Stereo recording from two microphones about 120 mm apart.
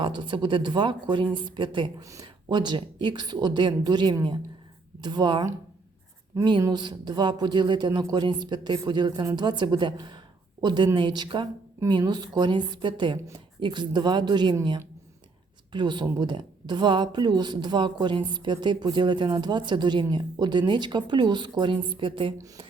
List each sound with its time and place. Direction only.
0.0 s a woman's voice: 40° right (ahead or behind)
2.0 s a woman's voice: 30° right (ahead or behind)
6.6 s a woman's voice: 35° right (ahead or behind)
15.7 s a woman's voice: 40° right (ahead or behind)